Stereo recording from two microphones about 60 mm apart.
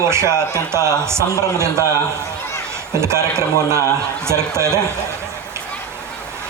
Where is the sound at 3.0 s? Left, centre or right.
Right.